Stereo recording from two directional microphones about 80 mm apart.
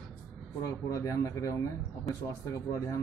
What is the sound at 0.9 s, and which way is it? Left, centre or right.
A man's voice, left.